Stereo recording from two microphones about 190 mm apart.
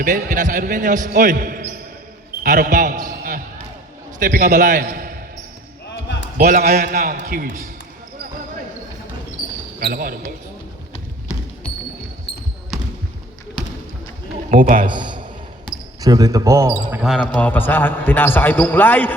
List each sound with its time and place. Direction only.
0.0 s speech: 40° right (ahead or behind)
5.9 s basketball bounce: 65° left (ahead or behind)
6.3 s speech: 50° right (ahead or behind)
9.8 s speech: 50° right (ahead or behind)
14.5 s speech: 45° right (ahead or behind)
14.8 s a man's voice: 25° right (ahead or behind)
17.0 s a man's voice: centre (ahead or behind)